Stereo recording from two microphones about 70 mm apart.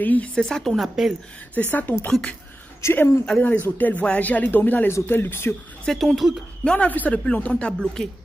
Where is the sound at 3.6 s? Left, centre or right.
Left.